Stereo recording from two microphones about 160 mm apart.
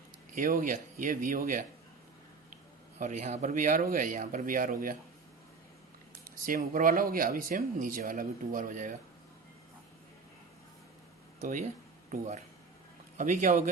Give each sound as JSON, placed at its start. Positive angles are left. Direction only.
{"t": 0.3, "sound": "speech", "side_deg": -60}
{"t": 3.0, "sound": "a man's voice", "side_deg": -45}
{"t": 6.2, "sound": "speech", "side_deg": -60}
{"t": 13.1, "sound": "a man's voice", "side_deg": -50}